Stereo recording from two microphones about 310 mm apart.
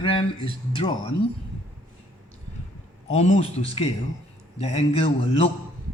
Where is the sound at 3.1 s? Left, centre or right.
Centre.